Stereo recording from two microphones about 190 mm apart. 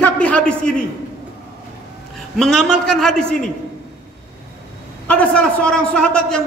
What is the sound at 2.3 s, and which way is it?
A man's voice, centre (ahead or behind).